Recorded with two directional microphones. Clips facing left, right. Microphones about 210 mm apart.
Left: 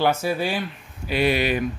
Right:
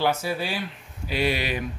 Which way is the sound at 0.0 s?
50° left (ahead or behind).